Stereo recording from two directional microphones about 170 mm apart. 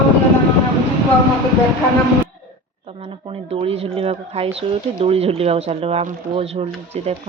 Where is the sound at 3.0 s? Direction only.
35° right (ahead or behind).